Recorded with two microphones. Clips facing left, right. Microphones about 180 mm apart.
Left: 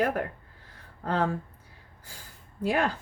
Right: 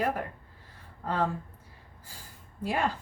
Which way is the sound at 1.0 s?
75° left (ahead or behind).